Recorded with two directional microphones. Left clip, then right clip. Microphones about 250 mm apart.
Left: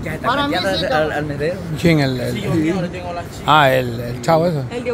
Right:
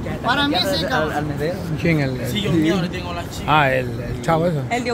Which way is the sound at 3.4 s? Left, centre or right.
Centre.